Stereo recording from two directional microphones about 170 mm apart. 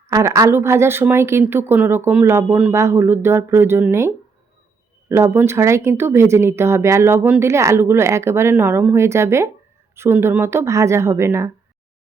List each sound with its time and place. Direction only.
0.1 s speech: 20° right (ahead or behind)